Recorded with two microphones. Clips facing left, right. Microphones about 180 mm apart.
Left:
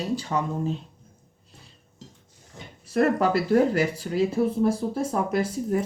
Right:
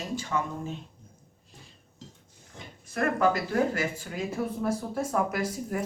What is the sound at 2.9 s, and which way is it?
Speech, 35° left (ahead or behind).